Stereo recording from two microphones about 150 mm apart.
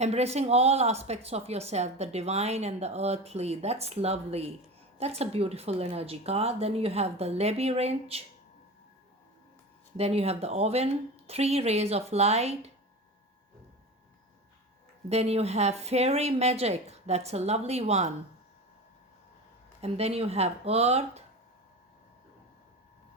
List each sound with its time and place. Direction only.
0.0 s a woman's voice: 45° right (ahead or behind)
10.0 s a woman's voice: 45° right (ahead or behind)
15.1 s a woman's voice: 45° right (ahead or behind)
19.8 s a woman's voice: 45° right (ahead or behind)